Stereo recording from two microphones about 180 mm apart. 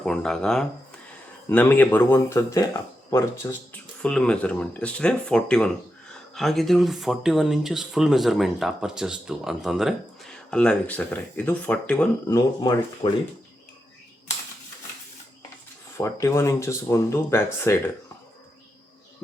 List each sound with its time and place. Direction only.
0.0 s speech: 5° left (ahead or behind)
12.3 s speech: 25° left (ahead or behind)
16.0 s speech: 15° left (ahead or behind)